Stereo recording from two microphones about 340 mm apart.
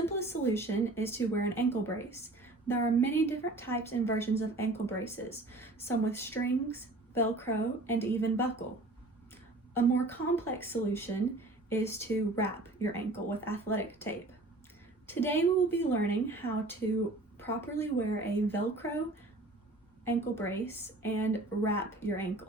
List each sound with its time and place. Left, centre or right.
0.3 s a woman's voice: centre
9.7 s a woman's voice: centre
20.1 s a woman's voice: centre